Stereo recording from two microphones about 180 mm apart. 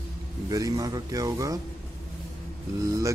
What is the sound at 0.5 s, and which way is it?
Speech, 20° right (ahead or behind).